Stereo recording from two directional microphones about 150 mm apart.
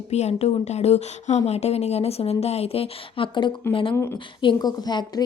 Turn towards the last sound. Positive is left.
turn(degrees=25)  # may be behind; listen again after turning